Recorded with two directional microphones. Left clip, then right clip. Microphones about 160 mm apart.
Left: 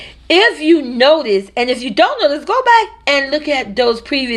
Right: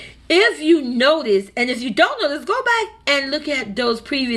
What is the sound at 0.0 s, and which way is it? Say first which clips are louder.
Speech: left 4 dB; 25° right (ahead or behind).